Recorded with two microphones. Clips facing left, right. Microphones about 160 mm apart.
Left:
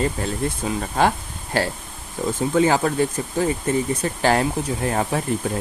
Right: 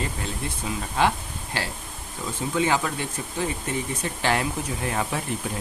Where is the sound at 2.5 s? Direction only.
40° left (ahead or behind).